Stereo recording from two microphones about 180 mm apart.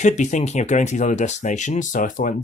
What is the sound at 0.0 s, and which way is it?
Speech, 40° left (ahead or behind).